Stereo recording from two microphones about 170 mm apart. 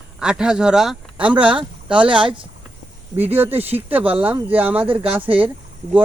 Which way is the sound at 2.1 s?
30° right (ahead or behind).